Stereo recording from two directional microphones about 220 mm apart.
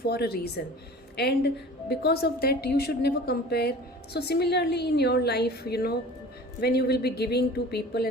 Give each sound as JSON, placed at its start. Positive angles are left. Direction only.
{"t": 0.0, "sound": "a woman's voice", "side_deg": 45}